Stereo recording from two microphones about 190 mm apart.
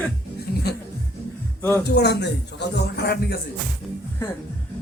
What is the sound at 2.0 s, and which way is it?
A man's voice, 60° left (ahead or behind).